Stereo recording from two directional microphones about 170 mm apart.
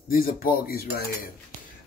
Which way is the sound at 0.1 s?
60° left (ahead or behind).